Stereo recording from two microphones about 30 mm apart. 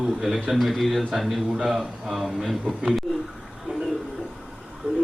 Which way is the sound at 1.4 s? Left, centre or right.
Centre.